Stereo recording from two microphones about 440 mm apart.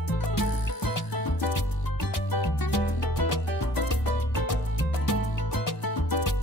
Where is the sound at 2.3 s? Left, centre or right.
Left.